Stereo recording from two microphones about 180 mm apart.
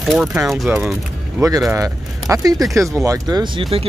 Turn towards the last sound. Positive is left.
turn(degrees=-30)  # may be behind; listen again after turning